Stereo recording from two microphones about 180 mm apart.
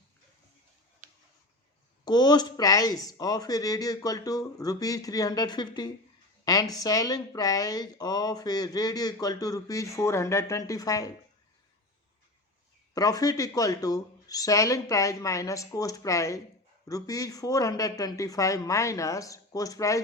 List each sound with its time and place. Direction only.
2.0 s speech: 25° left (ahead or behind)
12.9 s speech: 20° left (ahead or behind)